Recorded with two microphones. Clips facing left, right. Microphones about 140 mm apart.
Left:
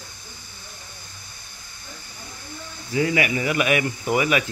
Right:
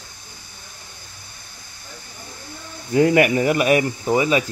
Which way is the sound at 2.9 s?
50° right (ahead or behind).